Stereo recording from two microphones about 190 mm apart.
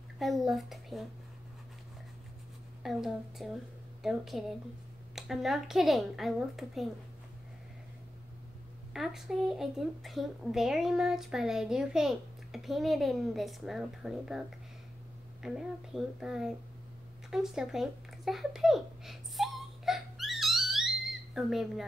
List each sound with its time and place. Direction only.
0.2 s a child's voice: centre (ahead or behind)
2.8 s speech: centre (ahead or behind)
8.9 s speech: centre (ahead or behind)
15.4 s speech: centre (ahead or behind)
17.3 s a sound: 5° right (ahead or behind)